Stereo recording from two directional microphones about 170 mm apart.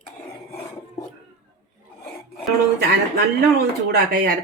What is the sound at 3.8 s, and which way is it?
Speech, 65° right (ahead or behind).